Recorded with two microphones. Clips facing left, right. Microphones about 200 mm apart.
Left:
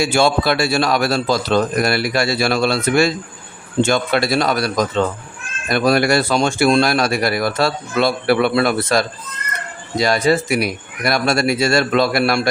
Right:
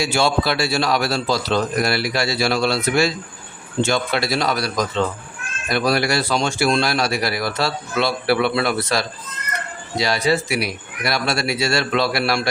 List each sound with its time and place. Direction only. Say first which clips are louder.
0.0 s a man's voice: left 3 dB; 50° left (ahead or behind)